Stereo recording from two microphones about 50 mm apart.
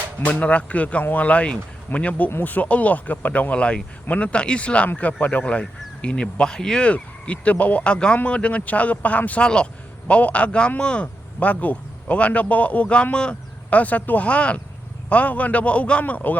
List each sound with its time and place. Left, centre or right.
0.3 s speech: left
9.4 s speech: centre
13.7 s speech: left